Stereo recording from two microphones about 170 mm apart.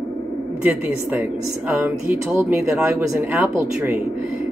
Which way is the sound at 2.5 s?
15° right (ahead or behind).